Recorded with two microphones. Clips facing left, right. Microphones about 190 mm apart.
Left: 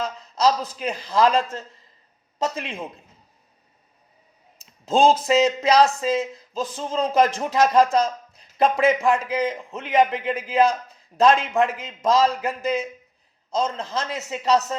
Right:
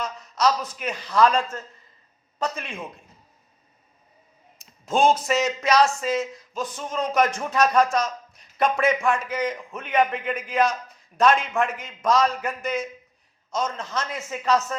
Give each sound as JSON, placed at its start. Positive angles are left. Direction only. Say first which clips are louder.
{"t": 0.0, "sound": "a man's voice", "louder": "left 2 dB", "side_deg": 30}
{"t": 1.3, "sound": "a man's voice", "louder": "left 2 dB", "side_deg": 20}
{"t": 4.9, "sound": "speech", "louder": "left 3 dB", "side_deg": 30}
{"t": 14.2, "sound": "speech", "louder": "left 2 dB", "side_deg": 20}